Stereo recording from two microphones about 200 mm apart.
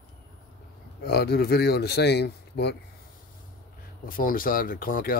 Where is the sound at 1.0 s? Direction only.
55° left (ahead or behind).